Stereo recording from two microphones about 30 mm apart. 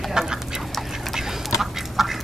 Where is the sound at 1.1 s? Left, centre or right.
Centre.